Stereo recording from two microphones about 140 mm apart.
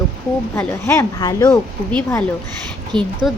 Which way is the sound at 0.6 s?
20° left (ahead or behind).